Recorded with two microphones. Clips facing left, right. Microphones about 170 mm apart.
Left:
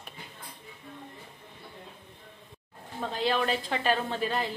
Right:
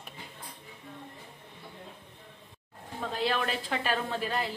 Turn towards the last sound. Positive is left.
turn(degrees=-5)  # may be behind; listen again after turning